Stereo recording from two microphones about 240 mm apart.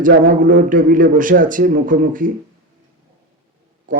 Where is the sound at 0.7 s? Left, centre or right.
Right.